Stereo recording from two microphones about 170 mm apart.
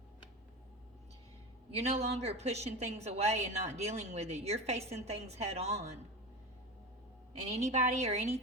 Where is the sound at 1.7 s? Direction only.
40° right (ahead or behind).